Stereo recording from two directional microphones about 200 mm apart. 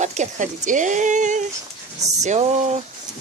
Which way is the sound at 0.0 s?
35° right (ahead or behind).